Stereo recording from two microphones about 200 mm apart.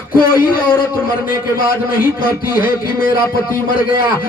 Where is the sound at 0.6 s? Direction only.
10° left (ahead or behind).